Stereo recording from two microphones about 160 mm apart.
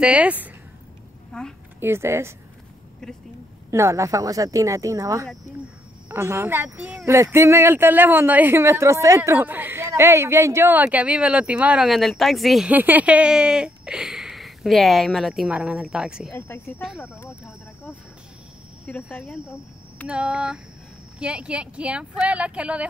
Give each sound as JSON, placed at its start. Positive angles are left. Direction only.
{"t": 0.0, "sound": "speech", "side_deg": -5}
{"t": 1.3, "sound": "speech", "side_deg": 5}
{"t": 1.8, "sound": "speech", "side_deg": -15}
{"t": 3.7, "sound": "speech", "side_deg": -20}
{"t": 16.3, "sound": "speech", "side_deg": 15}
{"t": 18.9, "sound": "speech", "side_deg": 10}
{"t": 19.2, "sound": "speech", "side_deg": -5}